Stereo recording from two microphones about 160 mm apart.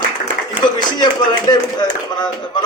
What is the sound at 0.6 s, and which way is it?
A man's voice, 25° left (ahead or behind).